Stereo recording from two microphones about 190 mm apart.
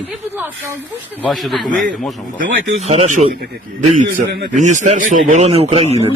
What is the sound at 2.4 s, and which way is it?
Speech, 35° right (ahead or behind).